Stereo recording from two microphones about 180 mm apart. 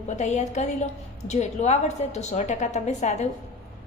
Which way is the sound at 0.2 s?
40° left (ahead or behind).